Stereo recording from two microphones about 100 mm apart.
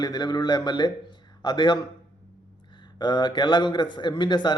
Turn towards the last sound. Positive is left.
turn(degrees=50)  # may be behind; listen again after turning